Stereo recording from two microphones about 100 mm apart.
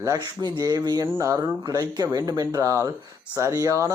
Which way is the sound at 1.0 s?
25° right (ahead or behind).